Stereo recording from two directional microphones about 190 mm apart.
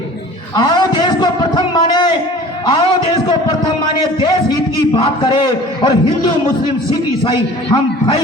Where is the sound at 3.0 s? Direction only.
25° left (ahead or behind).